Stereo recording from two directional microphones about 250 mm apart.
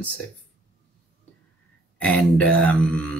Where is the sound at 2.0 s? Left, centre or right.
Centre.